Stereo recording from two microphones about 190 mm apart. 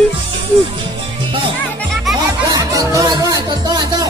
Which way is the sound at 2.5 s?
15° right (ahead or behind).